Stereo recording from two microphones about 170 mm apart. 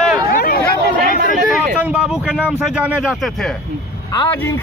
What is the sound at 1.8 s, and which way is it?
A man's voice, 5° right (ahead or behind).